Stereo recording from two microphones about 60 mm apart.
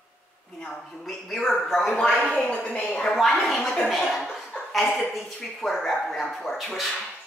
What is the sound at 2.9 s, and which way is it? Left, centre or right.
A woman's voice, centre.